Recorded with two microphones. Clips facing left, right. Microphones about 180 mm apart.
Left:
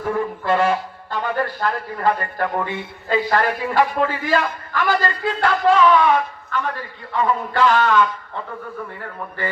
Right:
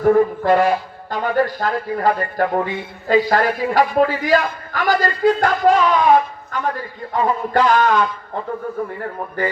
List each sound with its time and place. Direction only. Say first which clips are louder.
0.0 s a man's voice: right 9 dB; 40° right (ahead or behind)